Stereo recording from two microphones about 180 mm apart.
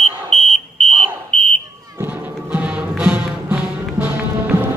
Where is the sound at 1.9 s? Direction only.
10° right (ahead or behind).